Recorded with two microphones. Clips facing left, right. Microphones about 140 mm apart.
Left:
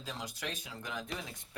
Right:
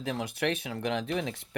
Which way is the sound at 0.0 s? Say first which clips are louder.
Right 11 dB; 65° right (ahead or behind).